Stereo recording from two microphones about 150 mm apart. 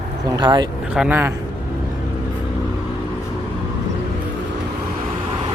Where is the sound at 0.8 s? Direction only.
5° right (ahead or behind).